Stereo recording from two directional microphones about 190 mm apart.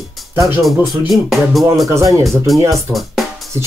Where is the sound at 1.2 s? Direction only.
Centre (ahead or behind).